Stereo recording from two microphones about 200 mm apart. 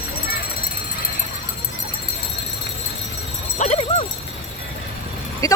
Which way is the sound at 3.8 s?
25° left (ahead or behind).